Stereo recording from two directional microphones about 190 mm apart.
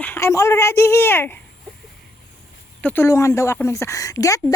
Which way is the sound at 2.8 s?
10° left (ahead or behind).